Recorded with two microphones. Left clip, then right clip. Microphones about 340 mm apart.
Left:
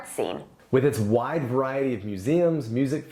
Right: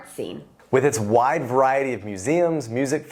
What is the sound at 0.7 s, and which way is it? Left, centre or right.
Speech, right.